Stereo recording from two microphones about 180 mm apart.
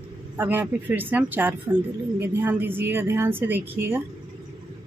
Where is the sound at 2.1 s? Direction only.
10° right (ahead or behind).